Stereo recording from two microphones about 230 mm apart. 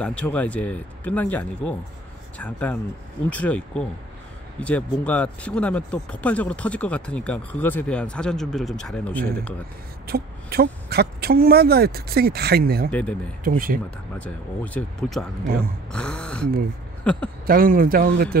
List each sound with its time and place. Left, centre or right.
0.0 s speech: centre
10.0 s speech: right
14.1 s speech: centre
17.5 s speech: right